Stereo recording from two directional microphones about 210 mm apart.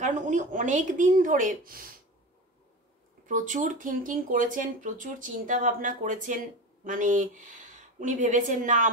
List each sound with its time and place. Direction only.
0.0 s speech: 35° right (ahead or behind)
3.3 s speech: 35° right (ahead or behind)